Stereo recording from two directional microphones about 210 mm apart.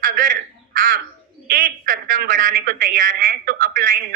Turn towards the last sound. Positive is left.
turn(degrees=-40)  # may be behind; listen again after turning